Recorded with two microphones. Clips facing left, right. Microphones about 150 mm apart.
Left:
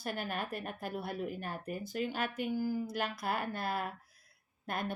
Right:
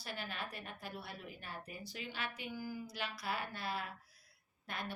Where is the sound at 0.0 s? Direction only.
50° left (ahead or behind).